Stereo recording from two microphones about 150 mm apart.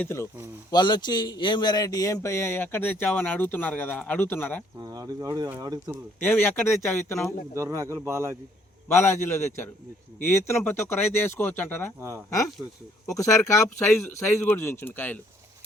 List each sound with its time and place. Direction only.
0.0 s speech: 15° left (ahead or behind)
0.7 s speech: 30° left (ahead or behind); by 4.6 s 10° left (ahead or behind)
4.8 s speech: 25° right (ahead or behind)
6.2 s speech: 15° left (ahead or behind)
7.5 s a man's voice: 20° right (ahead or behind)
9.0 s speech: 15° left (ahead or behind)
11.9 s a man's voice: 15° right (ahead or behind)
13.1 s speech: 20° left (ahead or behind)